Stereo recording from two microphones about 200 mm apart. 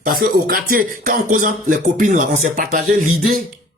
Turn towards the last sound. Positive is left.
turn(degrees=-40)  # may be behind; listen again after turning